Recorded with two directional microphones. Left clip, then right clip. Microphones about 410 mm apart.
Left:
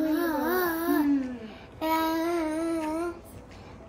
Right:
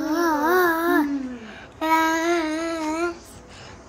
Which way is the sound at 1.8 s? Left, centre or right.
Right.